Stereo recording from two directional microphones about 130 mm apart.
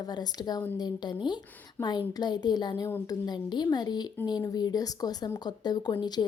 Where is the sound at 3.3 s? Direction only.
35° left (ahead or behind).